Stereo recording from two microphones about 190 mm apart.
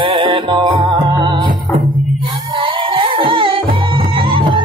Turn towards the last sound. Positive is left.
turn(degrees=-25)  # may be behind; listen again after turning